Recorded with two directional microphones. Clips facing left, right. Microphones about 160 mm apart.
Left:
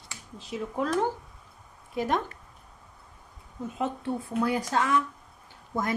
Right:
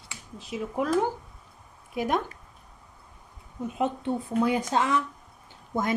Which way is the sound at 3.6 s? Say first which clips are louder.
Right 3 dB; 15° right (ahead or behind).